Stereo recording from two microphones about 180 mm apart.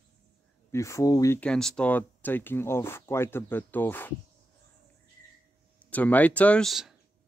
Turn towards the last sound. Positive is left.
turn(degrees=0)  # may be behind; listen again after turning